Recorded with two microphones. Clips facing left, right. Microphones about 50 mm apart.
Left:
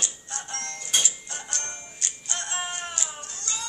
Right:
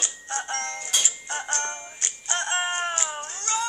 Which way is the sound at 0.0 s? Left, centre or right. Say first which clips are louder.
Right 5 dB; right.